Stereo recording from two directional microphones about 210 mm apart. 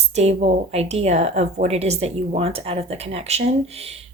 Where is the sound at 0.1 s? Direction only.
30° right (ahead or behind).